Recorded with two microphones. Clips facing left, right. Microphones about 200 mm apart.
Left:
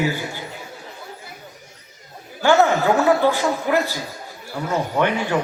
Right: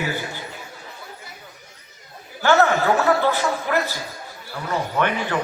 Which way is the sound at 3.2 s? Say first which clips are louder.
Left 3 dB; 15° left (ahead or behind).